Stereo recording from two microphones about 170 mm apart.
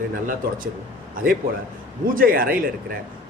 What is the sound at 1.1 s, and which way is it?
A man's voice, 60° right (ahead or behind).